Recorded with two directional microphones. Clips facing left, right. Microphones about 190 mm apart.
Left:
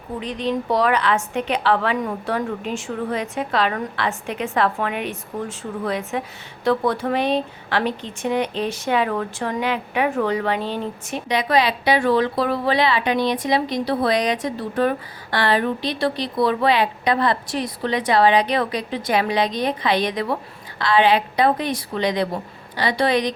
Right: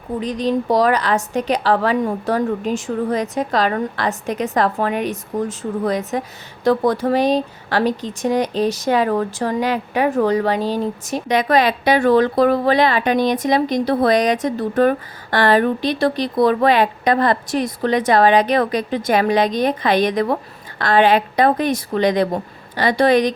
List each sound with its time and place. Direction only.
0.2 s a woman's voice: 40° right (ahead or behind)